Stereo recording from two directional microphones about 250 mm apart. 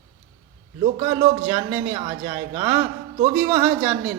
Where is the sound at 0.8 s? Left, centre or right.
Right.